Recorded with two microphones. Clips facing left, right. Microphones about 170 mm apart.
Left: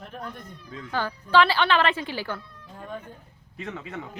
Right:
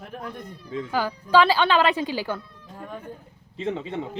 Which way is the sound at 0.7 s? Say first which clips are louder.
Right 10 dB; 25° right (ahead or behind).